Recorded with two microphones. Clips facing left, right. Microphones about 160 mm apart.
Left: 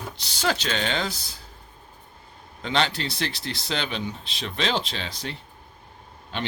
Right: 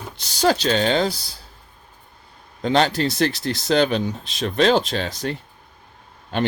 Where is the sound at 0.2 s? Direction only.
40° right (ahead or behind).